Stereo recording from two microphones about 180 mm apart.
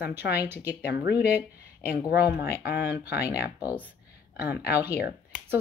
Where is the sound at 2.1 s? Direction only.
60° left (ahead or behind).